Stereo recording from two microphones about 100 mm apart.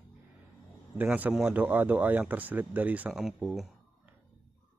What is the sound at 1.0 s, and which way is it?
Speech, 15° right (ahead or behind).